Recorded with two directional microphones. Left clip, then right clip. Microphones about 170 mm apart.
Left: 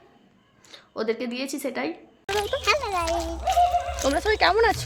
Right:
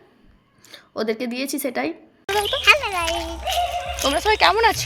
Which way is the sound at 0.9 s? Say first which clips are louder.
Right 3 dB; 20° right (ahead or behind).